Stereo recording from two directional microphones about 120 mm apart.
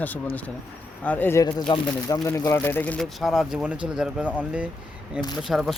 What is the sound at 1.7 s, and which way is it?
Speech, 35° left (ahead or behind).